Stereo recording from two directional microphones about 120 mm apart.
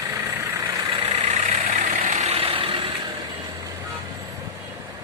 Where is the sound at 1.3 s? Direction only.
60° right (ahead or behind); by 2.3 s 75° right (ahead or behind).